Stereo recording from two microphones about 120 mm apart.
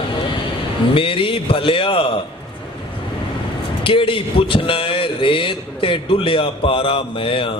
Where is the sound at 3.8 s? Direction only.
45° left (ahead or behind).